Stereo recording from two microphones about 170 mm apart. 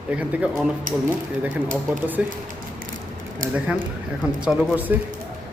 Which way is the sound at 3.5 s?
10° right (ahead or behind).